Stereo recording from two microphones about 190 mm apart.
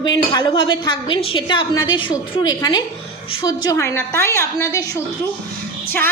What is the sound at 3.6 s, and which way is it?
A woman's voice, 15° left (ahead or behind).